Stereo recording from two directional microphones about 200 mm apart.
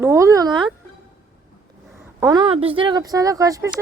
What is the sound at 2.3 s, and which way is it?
Speech, 25° right (ahead or behind).